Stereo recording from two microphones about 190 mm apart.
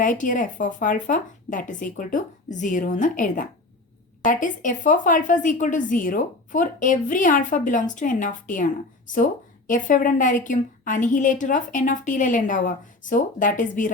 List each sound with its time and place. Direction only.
0.0 s speech: 45° left (ahead or behind)